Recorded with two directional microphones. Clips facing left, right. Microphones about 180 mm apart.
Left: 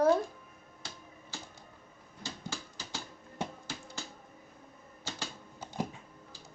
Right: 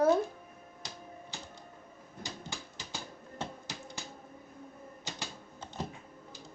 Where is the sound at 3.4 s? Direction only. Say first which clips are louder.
Left 2 dB; 15° left (ahead or behind).